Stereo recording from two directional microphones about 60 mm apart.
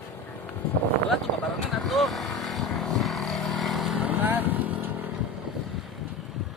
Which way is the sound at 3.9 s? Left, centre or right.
Right.